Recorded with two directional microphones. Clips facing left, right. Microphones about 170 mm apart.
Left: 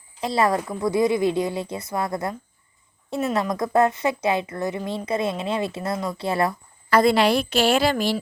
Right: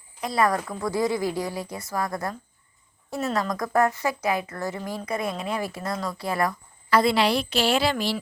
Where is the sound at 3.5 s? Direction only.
25° left (ahead or behind).